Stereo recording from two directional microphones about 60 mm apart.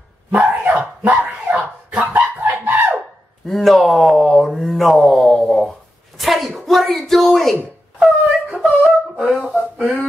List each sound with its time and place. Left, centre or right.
0.3 s dog: right
3.4 s speech: centre
8.0 s wail: centre
9.2 s speech: centre